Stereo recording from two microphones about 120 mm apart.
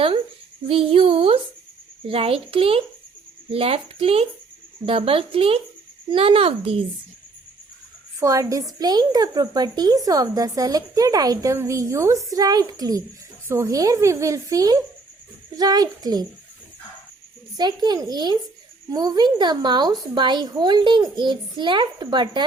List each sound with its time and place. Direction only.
0.7 s speech: 50° right (ahead or behind)
8.2 s a woman's voice: 25° right (ahead or behind)
17.6 s speech: 35° right (ahead or behind)